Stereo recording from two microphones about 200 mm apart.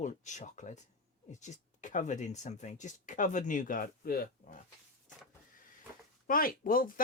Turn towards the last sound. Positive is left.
turn(degrees=45)  # may be behind; listen again after turning